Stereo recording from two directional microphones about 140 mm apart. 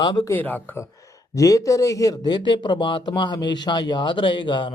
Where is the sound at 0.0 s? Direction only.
30° left (ahead or behind).